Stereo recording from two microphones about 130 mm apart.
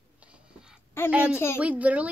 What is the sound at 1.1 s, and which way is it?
Speech, 10° right (ahead or behind).